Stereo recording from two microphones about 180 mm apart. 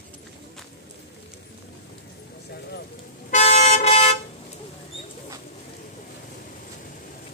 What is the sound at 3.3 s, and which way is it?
Toot, 40° left (ahead or behind).